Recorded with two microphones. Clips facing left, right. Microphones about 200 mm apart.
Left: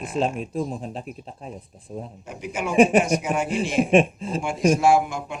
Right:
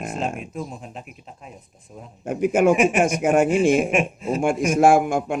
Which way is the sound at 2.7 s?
35° left (ahead or behind).